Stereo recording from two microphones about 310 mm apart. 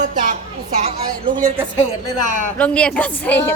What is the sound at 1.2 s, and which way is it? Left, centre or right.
Speech, centre.